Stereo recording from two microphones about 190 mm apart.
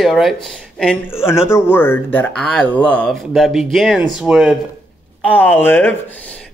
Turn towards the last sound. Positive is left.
turn(degrees=10)  # may be behind; listen again after turning